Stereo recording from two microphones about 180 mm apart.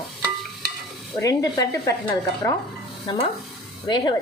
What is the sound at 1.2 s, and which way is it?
Speech, 20° left (ahead or behind).